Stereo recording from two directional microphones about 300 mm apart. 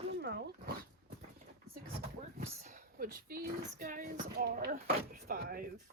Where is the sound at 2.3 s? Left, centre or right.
Right.